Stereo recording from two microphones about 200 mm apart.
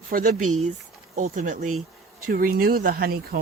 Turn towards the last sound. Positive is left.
turn(degrees=-50)  # may be behind; listen again after turning